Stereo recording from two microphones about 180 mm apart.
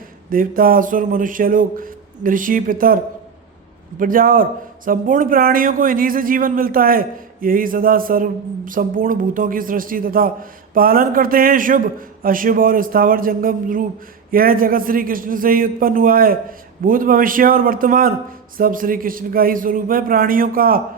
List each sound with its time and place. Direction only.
0.3 s speech: 50° right (ahead or behind)